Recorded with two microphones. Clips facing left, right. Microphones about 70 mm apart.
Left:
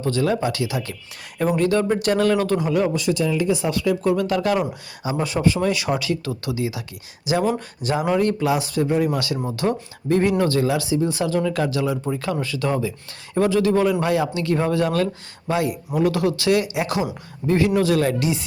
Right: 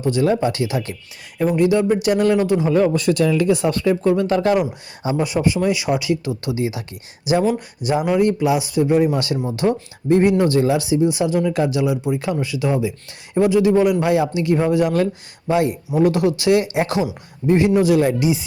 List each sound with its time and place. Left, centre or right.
0.0 s speech: right
1.5 s speech: centre
2.6 s speech: right
3.8 s speech: right
5.1 s speech: centre